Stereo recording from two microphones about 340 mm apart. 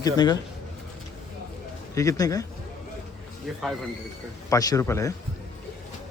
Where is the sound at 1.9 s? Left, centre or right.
Centre.